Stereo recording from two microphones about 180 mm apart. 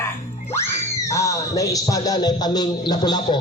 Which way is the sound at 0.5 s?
15° left (ahead or behind).